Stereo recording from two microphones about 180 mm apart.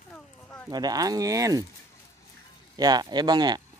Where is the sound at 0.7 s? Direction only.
20° right (ahead or behind).